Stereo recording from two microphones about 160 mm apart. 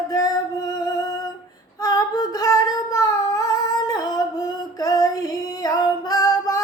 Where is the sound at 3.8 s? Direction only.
25° left (ahead or behind).